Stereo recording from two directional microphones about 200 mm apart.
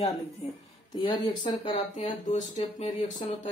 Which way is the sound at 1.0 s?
25° left (ahead or behind).